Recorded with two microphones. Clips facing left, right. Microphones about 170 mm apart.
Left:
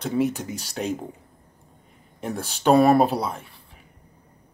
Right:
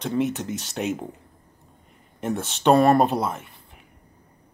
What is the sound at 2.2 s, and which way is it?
Speech, centre (ahead or behind).